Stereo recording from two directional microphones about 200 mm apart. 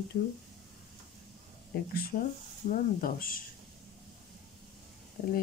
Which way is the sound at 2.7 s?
45° left (ahead or behind).